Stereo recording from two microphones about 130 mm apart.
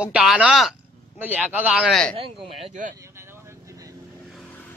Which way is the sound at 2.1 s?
50° right (ahead or behind).